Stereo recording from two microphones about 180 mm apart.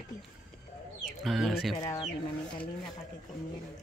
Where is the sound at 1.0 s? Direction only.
Centre (ahead or behind).